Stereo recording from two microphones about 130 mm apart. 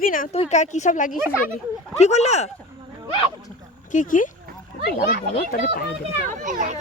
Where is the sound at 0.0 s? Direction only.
90° left.